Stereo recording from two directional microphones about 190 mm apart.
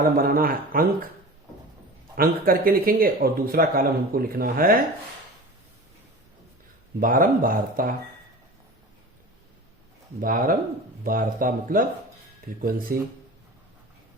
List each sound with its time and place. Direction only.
0.0 s speech: 50° right (ahead or behind)
2.1 s speech: 50° right (ahead or behind)
7.0 s speech: 45° right (ahead or behind)
10.2 s speech: 50° right (ahead or behind)